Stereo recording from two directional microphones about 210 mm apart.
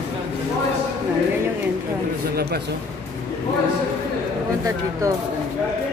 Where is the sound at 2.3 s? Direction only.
50° right (ahead or behind).